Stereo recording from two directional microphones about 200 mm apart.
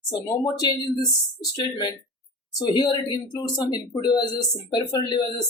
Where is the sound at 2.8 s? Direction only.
20° left (ahead or behind).